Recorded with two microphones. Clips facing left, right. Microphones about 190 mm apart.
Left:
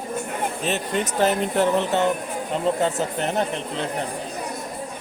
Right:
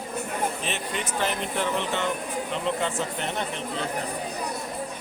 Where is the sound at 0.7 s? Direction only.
40° left (ahead or behind).